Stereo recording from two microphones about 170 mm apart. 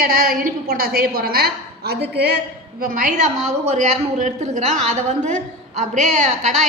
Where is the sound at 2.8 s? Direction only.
55° right (ahead or behind).